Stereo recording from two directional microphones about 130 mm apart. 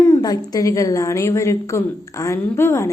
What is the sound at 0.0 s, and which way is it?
A woman's voice, 30° left (ahead or behind).